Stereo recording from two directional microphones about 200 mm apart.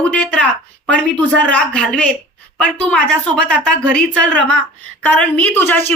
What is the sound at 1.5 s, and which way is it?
A woman's voice, 5° left (ahead or behind).